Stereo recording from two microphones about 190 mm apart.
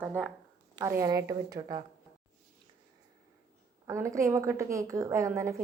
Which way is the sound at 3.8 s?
15° right (ahead or behind).